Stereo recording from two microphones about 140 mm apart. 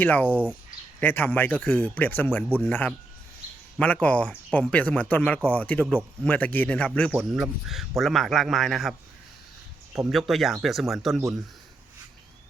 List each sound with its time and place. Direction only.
0.0 s speech: 10° left (ahead or behind)
0.3 s speech: 10° right (ahead or behind)
0.9 s a man's voice: 15° left (ahead or behind)
10.1 s a man's voice: centre (ahead or behind)